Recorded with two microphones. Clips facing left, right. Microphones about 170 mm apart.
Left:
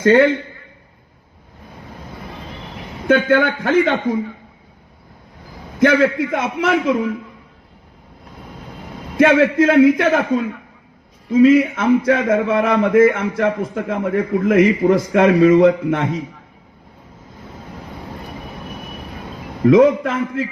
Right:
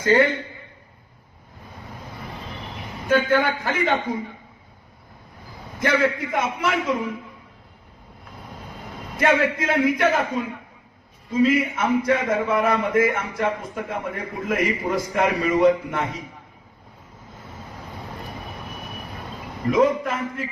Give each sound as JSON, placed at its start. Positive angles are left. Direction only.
{"t": 0.0, "sound": "a man's voice", "side_deg": 75}
{"t": 3.1, "sound": "a man's voice", "side_deg": 65}
{"t": 5.8, "sound": "a man's voice", "side_deg": 60}
{"t": 9.1, "sound": "a man's voice", "side_deg": 70}
{"t": 11.3, "sound": "a man's voice", "side_deg": 70}
{"t": 19.6, "sound": "a man's voice", "side_deg": 75}